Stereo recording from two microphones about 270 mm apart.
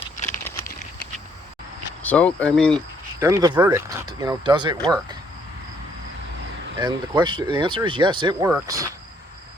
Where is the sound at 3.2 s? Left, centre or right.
Centre.